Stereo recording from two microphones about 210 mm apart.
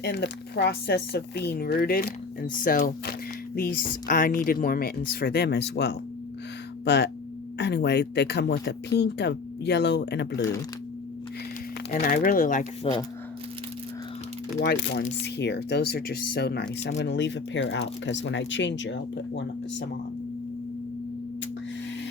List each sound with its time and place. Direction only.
0.0 s speech: 50° left (ahead or behind)
11.9 s speech: 40° left (ahead or behind)
14.6 s speech: 55° left (ahead or behind)